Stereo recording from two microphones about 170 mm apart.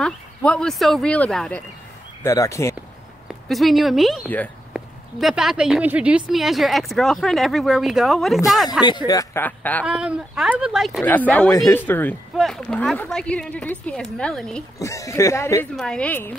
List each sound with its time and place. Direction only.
0.0 s a woman's voice: 5° left (ahead or behind)
2.2 s speech: 20° left (ahead or behind)
3.4 s a woman's voice: centre (ahead or behind)
8.8 s speech: 25° left (ahead or behind); by 9.8 s 10° left (ahead or behind)
9.8 s a woman's voice: 5° right (ahead or behind)
11.0 s a woman's voice: 10° left (ahead or behind)
14.8 s speech: 20° left (ahead or behind)
15.7 s speech: 5° left (ahead or behind)